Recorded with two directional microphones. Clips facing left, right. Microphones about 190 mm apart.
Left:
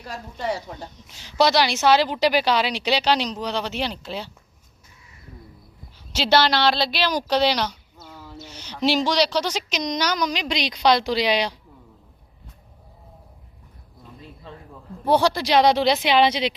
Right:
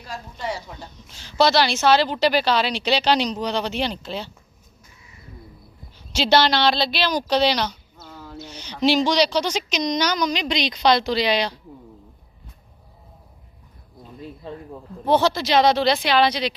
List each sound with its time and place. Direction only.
0.1 s speech: 55° left (ahead or behind)
0.8 s a woman's voice: 15° left (ahead or behind)
6.1 s a woman's voice: 5° left (ahead or behind)
7.9 s a sound: 5° left (ahead or behind)
8.4 s a woman's voice: 5° left (ahead or behind)
15.0 s a woman's voice: 10° left (ahead or behind)